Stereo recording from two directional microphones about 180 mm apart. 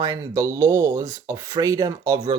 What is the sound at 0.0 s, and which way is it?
Speech, 20° right (ahead or behind).